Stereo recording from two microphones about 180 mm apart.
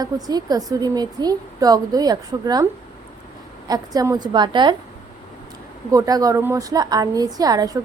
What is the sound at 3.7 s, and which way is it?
A woman's voice, 20° right (ahead or behind).